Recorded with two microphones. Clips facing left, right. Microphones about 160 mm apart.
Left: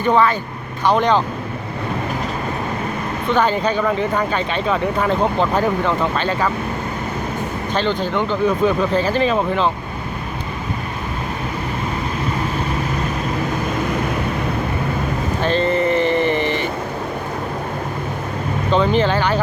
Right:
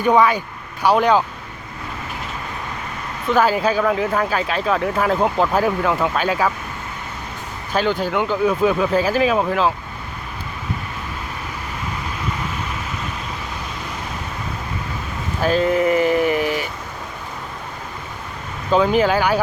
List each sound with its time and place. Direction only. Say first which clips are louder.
0.0 s speech: right 1 dB; 10° right (ahead or behind)
3.2 s speech: right 1 dB; 5° right (ahead or behind)
7.7 s speech: right 1 dB; 5° right (ahead or behind)
13.7 s vehicle: left 10 dB; 55° left (ahead or behind)
15.4 s speech: right 1 dB; 5° right (ahead or behind)
18.7 s speech: right 1 dB; 5° right (ahead or behind)